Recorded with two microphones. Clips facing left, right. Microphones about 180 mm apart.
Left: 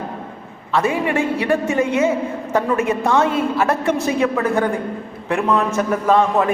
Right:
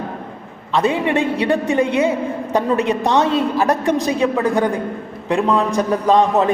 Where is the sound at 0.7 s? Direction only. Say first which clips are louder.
Right 2 dB; 20° right (ahead or behind).